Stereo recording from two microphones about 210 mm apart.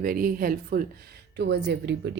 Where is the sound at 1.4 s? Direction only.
55° right (ahead or behind).